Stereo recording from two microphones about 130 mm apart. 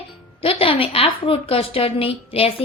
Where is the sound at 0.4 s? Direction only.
45° left (ahead or behind).